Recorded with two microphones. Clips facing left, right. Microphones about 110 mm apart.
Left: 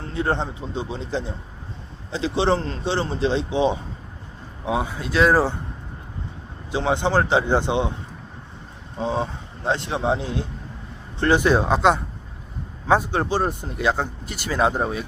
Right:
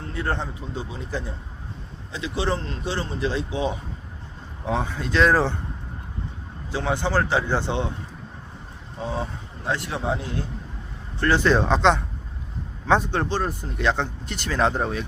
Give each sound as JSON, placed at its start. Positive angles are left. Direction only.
{"t": 0.1, "sound": "speech", "side_deg": 20}
{"t": 4.6, "sound": "speech", "side_deg": 10}
{"t": 6.7, "sound": "speech", "side_deg": 20}
{"t": 9.0, "sound": "speech", "side_deg": 25}
{"t": 13.4, "sound": "speech", "side_deg": 20}
{"t": 13.7, "sound": "speech", "side_deg": 5}